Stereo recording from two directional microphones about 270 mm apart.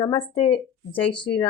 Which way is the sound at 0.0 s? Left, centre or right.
Centre.